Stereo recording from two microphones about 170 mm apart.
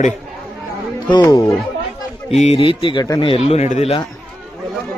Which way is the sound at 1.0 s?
25° left (ahead or behind).